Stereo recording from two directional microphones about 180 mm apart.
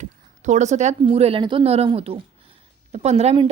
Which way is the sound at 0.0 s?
40° right (ahead or behind).